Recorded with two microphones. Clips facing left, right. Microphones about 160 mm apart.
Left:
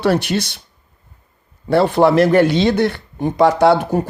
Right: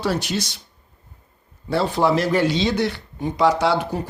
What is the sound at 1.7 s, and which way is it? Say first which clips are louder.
Speech: left 6 dB; 60° left (ahead or behind).